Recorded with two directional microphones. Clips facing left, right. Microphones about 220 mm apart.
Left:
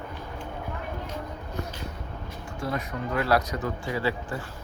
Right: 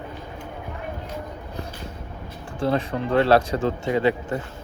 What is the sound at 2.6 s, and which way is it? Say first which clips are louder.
Speech: right 8 dB; 30° right (ahead or behind).